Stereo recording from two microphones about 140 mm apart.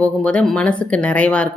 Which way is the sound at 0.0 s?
10° left (ahead or behind).